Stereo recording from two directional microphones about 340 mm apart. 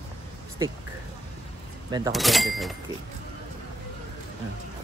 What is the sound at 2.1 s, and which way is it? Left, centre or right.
Speech, centre.